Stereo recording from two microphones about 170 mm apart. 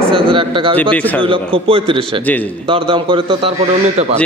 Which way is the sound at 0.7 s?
10° left (ahead or behind).